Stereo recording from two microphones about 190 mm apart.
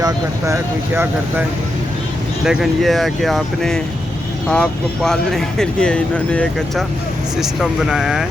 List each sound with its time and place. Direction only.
0.0 s speech: 15° right (ahead or behind)
2.4 s speech: centre (ahead or behind)